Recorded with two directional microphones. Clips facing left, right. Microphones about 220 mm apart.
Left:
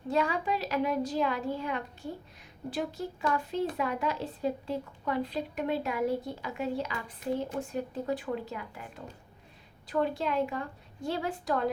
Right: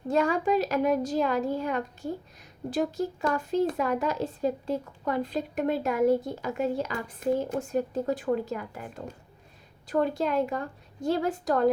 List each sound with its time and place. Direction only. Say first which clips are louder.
0.1 s speech: right 5 dB; 45° right (ahead or behind)
9.9 s speech: right 4 dB; 45° right (ahead or behind)